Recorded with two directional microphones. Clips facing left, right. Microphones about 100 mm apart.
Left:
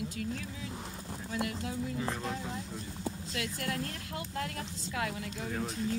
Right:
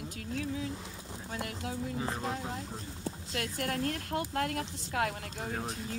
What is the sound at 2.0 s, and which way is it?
Speech, 30° right (ahead or behind).